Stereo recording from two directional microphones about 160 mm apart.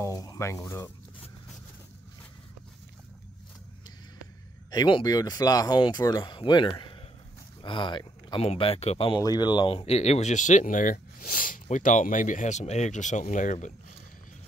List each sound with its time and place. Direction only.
0.0 s speech: 20° left (ahead or behind)
4.6 s speech: 30° left (ahead or behind)
8.5 s speech: 40° left (ahead or behind)
9.2 s speech: 25° left (ahead or behind)
9.8 s speech: 40° left (ahead or behind)